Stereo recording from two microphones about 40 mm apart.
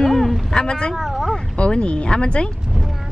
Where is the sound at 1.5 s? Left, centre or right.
Left.